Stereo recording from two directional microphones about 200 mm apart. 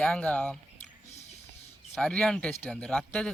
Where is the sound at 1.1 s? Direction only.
35° left (ahead or behind).